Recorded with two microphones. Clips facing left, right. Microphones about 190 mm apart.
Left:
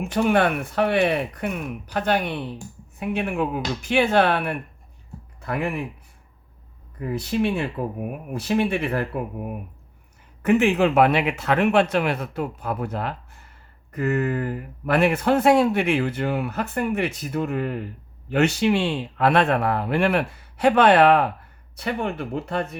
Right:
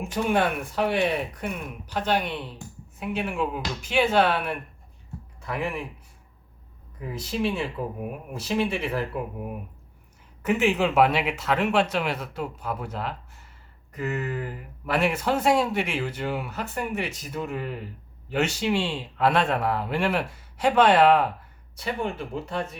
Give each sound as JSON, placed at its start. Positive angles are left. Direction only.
{"t": 0.0, "sound": "speech", "side_deg": 65}
{"t": 7.0, "sound": "speech", "side_deg": 55}
{"t": 10.4, "sound": "speech", "side_deg": 55}